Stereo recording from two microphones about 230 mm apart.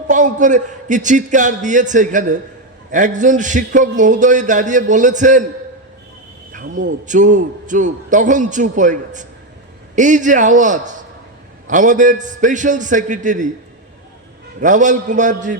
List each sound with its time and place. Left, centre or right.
0.1 s a man's voice: right
6.5 s a sound: right
7.0 s a man's voice: right
14.6 s a man's voice: right